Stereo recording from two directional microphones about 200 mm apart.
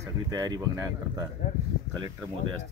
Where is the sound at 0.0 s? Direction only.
20° right (ahead or behind).